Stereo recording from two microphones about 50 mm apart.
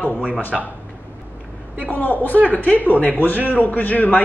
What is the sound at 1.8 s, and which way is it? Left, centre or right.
Speech, left.